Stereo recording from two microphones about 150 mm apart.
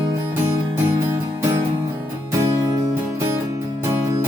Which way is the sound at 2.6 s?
20° right (ahead or behind).